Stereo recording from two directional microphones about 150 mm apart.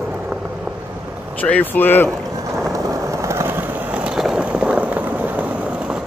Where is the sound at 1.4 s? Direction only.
10° left (ahead or behind).